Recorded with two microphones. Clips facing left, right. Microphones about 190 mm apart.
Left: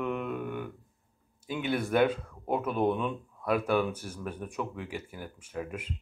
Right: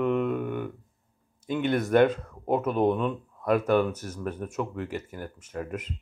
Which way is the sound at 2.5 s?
45° right (ahead or behind).